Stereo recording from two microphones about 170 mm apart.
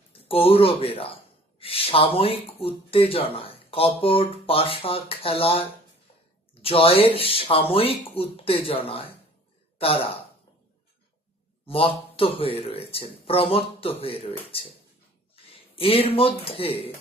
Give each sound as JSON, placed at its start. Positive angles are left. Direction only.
{"t": 0.1, "sound": "a man's voice", "side_deg": 35}
{"t": 11.6, "sound": "speech", "side_deg": 35}
{"t": 15.7, "sound": "speech", "side_deg": 35}